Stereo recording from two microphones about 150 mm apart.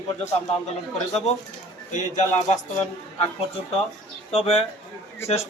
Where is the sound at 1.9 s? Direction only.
55° left (ahead or behind).